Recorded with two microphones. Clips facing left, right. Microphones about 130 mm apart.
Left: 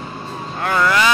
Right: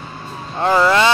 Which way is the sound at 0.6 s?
25° right (ahead or behind).